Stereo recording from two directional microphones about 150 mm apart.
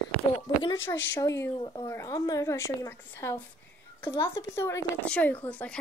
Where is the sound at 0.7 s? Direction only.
15° left (ahead or behind).